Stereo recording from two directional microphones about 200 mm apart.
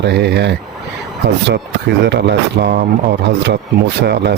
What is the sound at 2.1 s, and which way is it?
Speech, 60° right (ahead or behind).